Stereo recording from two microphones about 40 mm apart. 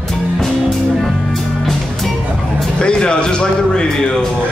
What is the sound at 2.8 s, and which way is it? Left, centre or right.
Music, left.